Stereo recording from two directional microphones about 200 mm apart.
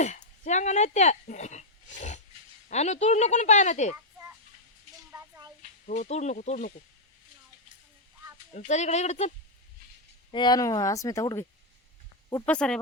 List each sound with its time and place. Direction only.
0.0 s speech: 35° left (ahead or behind)
5.1 s a sound: 15° right (ahead or behind)
5.8 s speech: 40° left (ahead or behind)
8.5 s speech: 35° left (ahead or behind)
10.3 s speech: 20° left (ahead or behind)
12.5 s speech: 5° left (ahead or behind)